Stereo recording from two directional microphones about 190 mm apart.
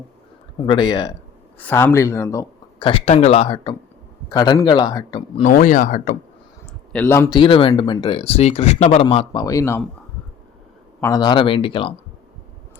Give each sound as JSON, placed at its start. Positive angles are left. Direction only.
{"t": 0.6, "sound": "speech", "side_deg": 25}
{"t": 1.5, "sound": "speech", "side_deg": 10}
{"t": 5.4, "sound": "speech", "side_deg": 45}
{"t": 6.9, "sound": "speech", "side_deg": 10}
{"t": 7.3, "sound": "speech", "side_deg": 25}
{"t": 11.0, "sound": "speech", "side_deg": 20}